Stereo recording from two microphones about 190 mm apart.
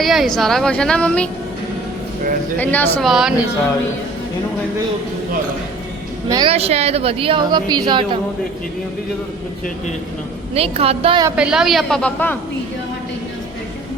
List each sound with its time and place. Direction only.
0.0 s a woman's voice: centre (ahead or behind)
2.6 s a woman's voice: 10° left (ahead or behind)
3.1 s a woman's voice: centre (ahead or behind)
6.2 s a woman's voice: 20° right (ahead or behind)
6.5 s a woman's voice: 30° right (ahead or behind)
10.5 s a woman's voice: 30° right (ahead or behind)
11.3 s a woman's voice: 5° right (ahead or behind)